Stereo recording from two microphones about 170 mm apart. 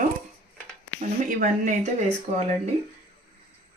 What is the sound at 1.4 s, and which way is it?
Speech, 45° right (ahead or behind).